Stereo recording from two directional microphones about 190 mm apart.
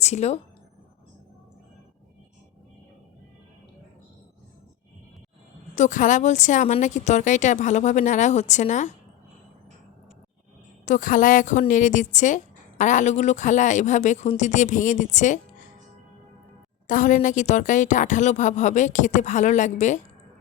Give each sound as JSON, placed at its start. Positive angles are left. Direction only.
{"t": 0.0, "sound": "speech", "side_deg": 35}
{"t": 5.7, "sound": "a woman's voice", "side_deg": 40}
{"t": 10.8, "sound": "a woman's voice", "side_deg": 45}
{"t": 16.8, "sound": "a woman's voice", "side_deg": 45}